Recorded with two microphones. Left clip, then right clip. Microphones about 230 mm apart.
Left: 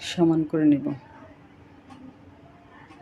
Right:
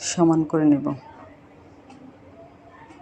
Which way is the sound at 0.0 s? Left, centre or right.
Centre.